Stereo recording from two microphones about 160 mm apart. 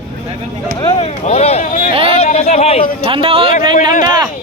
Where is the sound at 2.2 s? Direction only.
40° left (ahead or behind).